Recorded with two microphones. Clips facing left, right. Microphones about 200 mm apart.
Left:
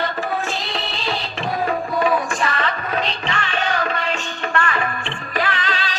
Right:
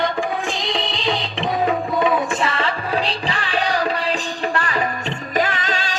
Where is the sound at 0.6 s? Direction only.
15° right (ahead or behind).